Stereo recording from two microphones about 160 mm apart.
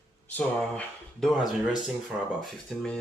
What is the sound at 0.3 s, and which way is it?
Speech, 10° left (ahead or behind).